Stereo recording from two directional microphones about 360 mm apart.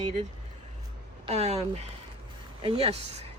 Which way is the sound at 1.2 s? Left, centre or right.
Centre.